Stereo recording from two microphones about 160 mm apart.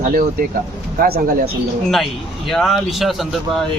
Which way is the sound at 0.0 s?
60° right (ahead or behind).